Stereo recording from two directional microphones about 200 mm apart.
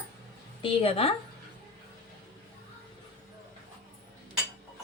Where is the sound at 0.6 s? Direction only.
30° left (ahead or behind).